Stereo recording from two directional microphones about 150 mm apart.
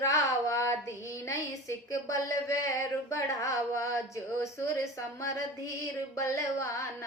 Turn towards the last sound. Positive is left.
turn(degrees=20)  # may be behind; listen again after turning